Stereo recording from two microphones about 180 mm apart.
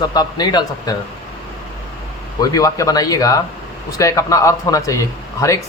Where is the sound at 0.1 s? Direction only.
20° left (ahead or behind).